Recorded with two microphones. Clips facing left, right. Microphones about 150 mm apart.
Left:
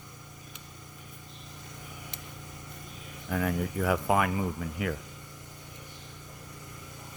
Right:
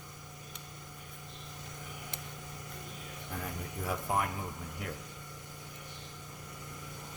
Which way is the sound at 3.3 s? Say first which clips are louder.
Left 12 dB; 85° left.